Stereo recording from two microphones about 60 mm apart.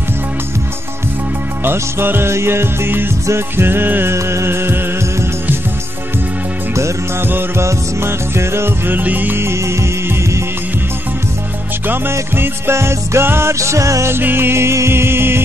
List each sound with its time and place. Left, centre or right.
1.6 s music: right
4.1 s music: right
7.2 s music: right
7.6 s music: right
9.4 s music: right
11.9 s music: right
14.0 s music: right